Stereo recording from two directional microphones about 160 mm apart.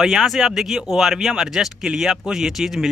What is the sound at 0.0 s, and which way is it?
A man's voice, centre (ahead or behind).